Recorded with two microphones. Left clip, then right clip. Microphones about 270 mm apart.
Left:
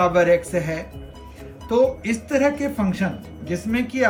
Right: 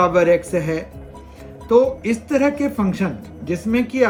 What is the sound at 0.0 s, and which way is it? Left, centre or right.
Speech, centre.